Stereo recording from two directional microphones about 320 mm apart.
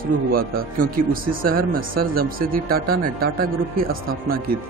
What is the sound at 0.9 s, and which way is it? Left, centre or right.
A man's voice, right.